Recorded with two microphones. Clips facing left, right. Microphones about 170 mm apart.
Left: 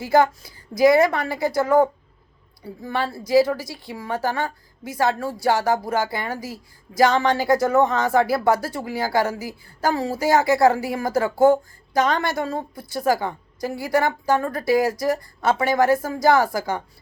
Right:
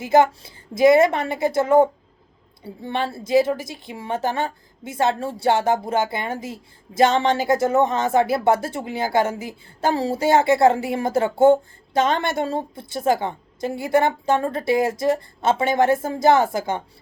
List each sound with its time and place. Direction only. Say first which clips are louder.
0.0 s a woman's voice: right 1 dB; 20° right (ahead or behind)